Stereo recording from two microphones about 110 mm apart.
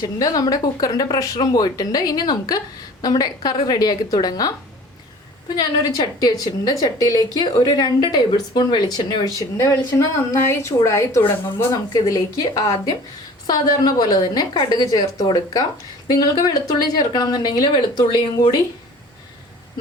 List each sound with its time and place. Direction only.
0.0 s a woman's voice: 35° left (ahead or behind)
5.5 s a woman's voice: 35° left (ahead or behind)
11.7 s a woman's voice: 35° left (ahead or behind)